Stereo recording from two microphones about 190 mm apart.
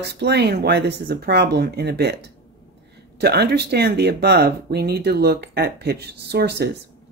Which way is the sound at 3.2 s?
60° right (ahead or behind).